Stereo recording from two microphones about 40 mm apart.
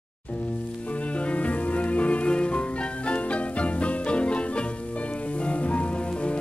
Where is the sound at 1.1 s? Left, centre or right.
Left.